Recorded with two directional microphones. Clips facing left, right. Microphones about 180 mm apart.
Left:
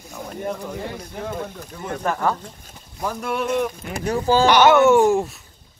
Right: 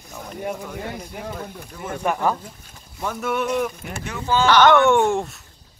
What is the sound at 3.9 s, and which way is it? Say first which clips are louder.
Speech: left 5 dB; 35° left (ahead or behind).